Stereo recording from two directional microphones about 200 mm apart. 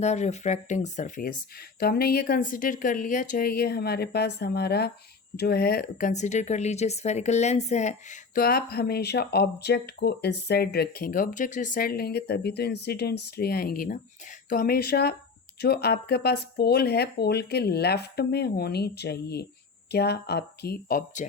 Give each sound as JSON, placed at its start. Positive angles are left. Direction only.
{"t": 0.0, "sound": "speech", "side_deg": 35}